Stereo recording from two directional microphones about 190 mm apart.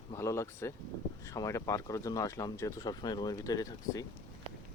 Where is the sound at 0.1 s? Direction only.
15° left (ahead or behind).